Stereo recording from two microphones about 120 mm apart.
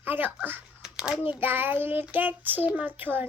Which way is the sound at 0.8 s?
5° right (ahead or behind).